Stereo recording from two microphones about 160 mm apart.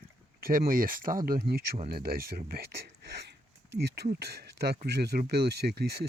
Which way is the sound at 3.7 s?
90° right.